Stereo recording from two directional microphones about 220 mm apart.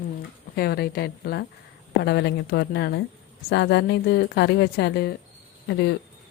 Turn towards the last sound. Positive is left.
turn(degrees=50)  # may be behind; listen again after turning